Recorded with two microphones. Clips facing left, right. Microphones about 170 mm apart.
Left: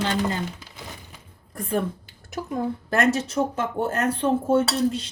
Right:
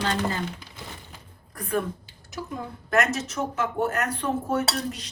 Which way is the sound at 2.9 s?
30° left (ahead or behind).